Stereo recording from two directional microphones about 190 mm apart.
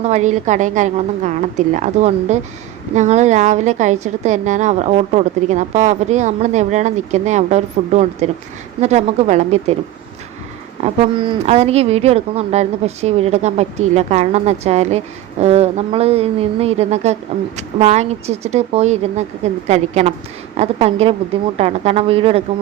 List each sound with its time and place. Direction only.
0.0 s speech: 40° right (ahead or behind)
10.8 s speech: 30° right (ahead or behind)